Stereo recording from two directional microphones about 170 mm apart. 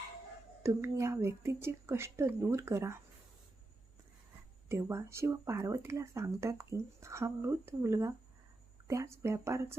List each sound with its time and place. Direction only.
0.6 s speech: 15° right (ahead or behind)
4.7 s speech: 15° right (ahead or behind)